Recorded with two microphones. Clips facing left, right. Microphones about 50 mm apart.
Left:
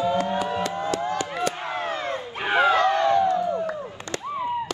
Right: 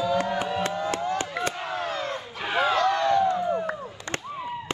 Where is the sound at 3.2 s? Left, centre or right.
Right.